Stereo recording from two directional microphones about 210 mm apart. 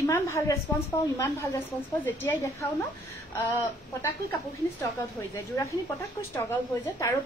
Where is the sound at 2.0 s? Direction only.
10° left (ahead or behind).